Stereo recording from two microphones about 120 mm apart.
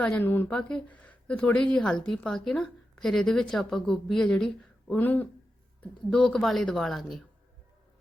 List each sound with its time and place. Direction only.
0.0 s speech: 15° left (ahead or behind)
0.4 s speech: 5° left (ahead or behind)